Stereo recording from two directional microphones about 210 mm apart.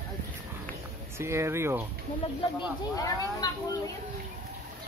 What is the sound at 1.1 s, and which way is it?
Speech, 10° right (ahead or behind).